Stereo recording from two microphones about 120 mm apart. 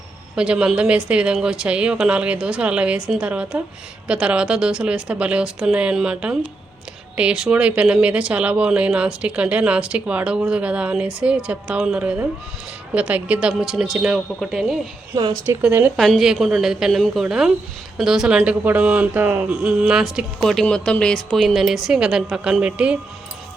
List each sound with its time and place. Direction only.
0.3 s speech: 10° right (ahead or behind)
15.1 s speech: 35° right (ahead or behind)
16.0 s speech: centre (ahead or behind)